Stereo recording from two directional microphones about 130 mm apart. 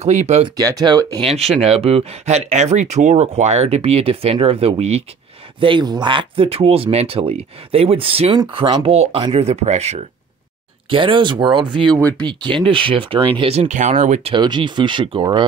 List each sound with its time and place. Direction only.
0.0 s speech: 60° right (ahead or behind)
0.6 s speech: 30° right (ahead or behind)
1.2 s speech: 50° right (ahead or behind)
5.6 s speech: 40° right (ahead or behind)
8.8 s speech: 50° right (ahead or behind)
10.9 s speech: 40° right (ahead or behind)
12.0 s speech: 10° left (ahead or behind)
12.6 s speech: 40° right (ahead or behind)
13.4 s speech: 55° right (ahead or behind)
14.3 s speech: 35° right (ahead or behind)